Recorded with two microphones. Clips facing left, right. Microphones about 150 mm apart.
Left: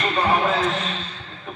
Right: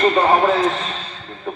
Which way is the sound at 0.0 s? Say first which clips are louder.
Right 6 dB; 50° right (ahead or behind).